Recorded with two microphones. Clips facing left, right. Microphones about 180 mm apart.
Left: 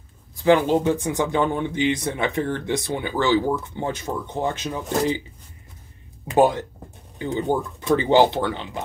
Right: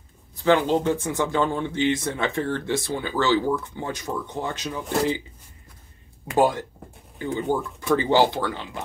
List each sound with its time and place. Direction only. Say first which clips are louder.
0.4 s speech: left 2 dB; 15° left (ahead or behind)
6.2 s speech: left 3 dB; 20° left (ahead or behind)